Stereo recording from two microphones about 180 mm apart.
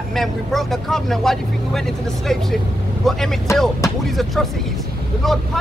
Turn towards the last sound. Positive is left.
turn(degrees=0)  # may be behind; listen again after turning